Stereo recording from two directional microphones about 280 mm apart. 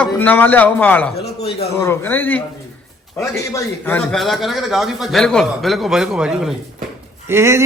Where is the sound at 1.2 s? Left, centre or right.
Left.